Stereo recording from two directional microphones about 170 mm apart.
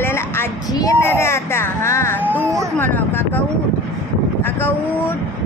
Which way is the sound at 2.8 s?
10° left (ahead or behind).